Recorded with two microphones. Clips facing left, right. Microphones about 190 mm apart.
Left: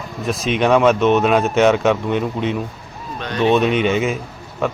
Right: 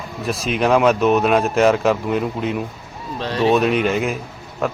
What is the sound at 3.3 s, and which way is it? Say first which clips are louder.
Speech: left 1 dB; 30° right (ahead or behind).